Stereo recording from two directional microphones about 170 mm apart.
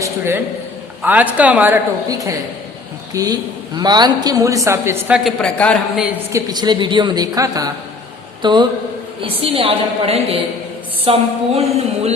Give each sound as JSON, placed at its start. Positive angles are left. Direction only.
{"t": 0.0, "sound": "a man's voice", "side_deg": -15}
{"t": 2.0, "sound": "a woman's voice", "side_deg": -20}
{"t": 6.3, "sound": "a woman's voice", "side_deg": -25}